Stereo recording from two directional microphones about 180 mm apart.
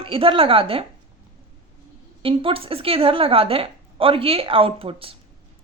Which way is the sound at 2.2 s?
30° right (ahead or behind).